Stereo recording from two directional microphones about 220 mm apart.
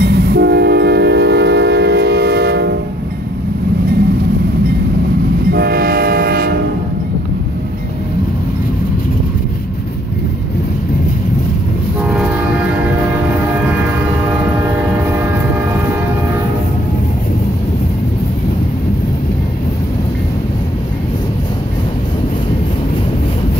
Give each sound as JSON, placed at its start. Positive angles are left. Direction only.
{"t": 0.0, "sound": "train", "side_deg": -50}
{"t": 5.5, "sound": "train", "side_deg": -45}
{"t": 12.0, "sound": "train", "side_deg": -5}